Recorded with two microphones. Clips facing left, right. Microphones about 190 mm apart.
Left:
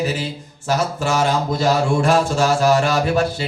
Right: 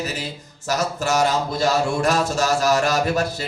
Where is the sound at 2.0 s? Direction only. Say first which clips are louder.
Left 3 dB; 40° right (ahead or behind).